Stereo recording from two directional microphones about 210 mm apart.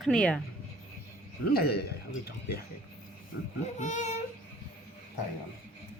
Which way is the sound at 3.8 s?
35° left (ahead or behind).